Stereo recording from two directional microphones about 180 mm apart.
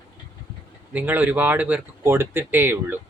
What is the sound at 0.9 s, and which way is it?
Speech, 10° right (ahead or behind).